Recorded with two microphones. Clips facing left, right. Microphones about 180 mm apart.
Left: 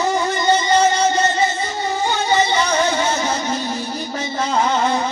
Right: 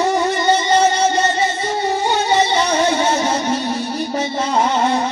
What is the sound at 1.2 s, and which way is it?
Music, 70° right (ahead or behind).